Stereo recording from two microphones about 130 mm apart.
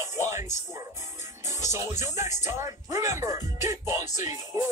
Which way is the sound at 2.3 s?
65° left (ahead or behind).